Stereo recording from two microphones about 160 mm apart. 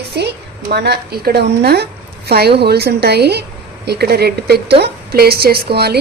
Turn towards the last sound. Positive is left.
turn(degrees=-85)